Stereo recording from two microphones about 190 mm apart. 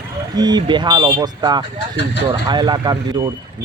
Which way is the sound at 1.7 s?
65° left (ahead or behind).